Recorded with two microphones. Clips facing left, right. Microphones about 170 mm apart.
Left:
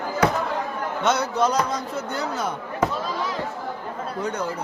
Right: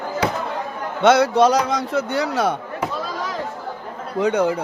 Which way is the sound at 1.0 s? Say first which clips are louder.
Right 8 dB; 90° right.